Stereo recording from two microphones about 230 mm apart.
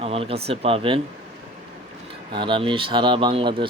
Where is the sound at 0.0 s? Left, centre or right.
Right.